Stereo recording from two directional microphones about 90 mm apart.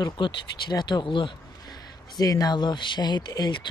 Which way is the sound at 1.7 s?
45° left (ahead or behind).